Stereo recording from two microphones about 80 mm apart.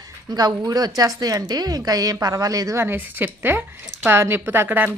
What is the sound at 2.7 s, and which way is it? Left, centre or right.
A woman's voice, right.